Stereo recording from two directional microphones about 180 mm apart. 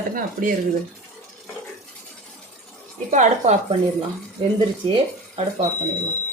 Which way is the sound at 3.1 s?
40° right (ahead or behind).